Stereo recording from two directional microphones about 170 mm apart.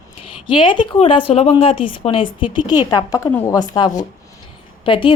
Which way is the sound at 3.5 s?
25° left (ahead or behind).